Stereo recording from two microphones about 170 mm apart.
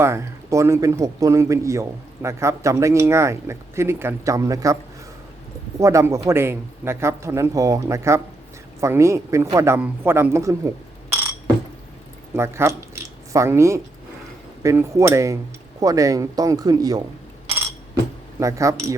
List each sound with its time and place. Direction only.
0.0 s speech: 15° right (ahead or behind)
5.8 s speech: 15° right (ahead or behind)
12.3 s speech: 15° right (ahead or behind)
18.3 s speech: 20° right (ahead or behind)